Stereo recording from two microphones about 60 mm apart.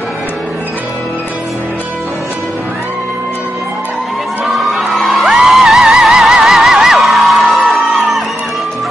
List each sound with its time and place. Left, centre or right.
4.5 s music: centre